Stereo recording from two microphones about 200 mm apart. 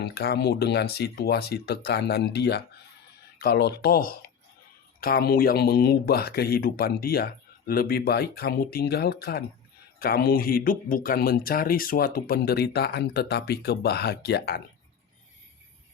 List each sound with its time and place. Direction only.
0.0 s speech: 50° left (ahead or behind)